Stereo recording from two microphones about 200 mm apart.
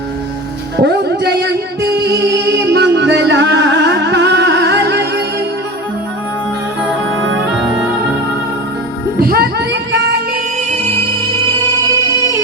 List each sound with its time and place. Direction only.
0.8 s music: 55° right (ahead or behind)
9.1 s music: 50° right (ahead or behind)